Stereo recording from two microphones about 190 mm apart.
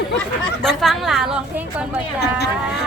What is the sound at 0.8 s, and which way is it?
A woman's voice, centre (ahead or behind).